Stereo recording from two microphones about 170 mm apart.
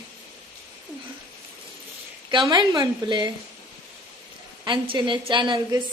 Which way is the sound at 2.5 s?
25° right (ahead or behind).